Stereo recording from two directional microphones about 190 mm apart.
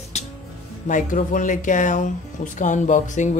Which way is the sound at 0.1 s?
35° left (ahead or behind).